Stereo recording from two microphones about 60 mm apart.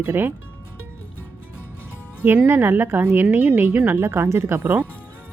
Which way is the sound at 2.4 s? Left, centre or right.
Right.